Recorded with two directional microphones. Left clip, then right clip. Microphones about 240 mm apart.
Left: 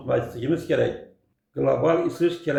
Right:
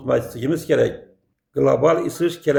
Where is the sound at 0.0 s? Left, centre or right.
Right.